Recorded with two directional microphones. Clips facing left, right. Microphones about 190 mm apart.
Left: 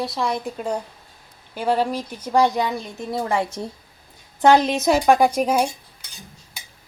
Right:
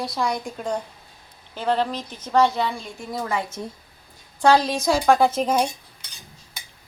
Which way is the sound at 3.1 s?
30° left (ahead or behind).